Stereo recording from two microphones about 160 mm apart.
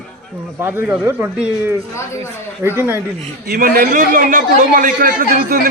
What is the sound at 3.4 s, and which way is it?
A man's voice, 65° right (ahead or behind).